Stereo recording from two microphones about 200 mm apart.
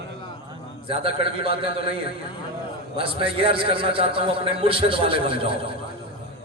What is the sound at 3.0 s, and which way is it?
A man's voice, 25° right (ahead or behind).